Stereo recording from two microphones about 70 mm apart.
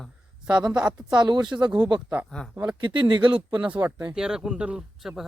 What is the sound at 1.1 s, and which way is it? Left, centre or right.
Speech, right.